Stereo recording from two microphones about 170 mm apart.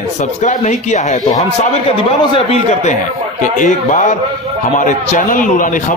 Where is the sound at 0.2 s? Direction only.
45° left (ahead or behind).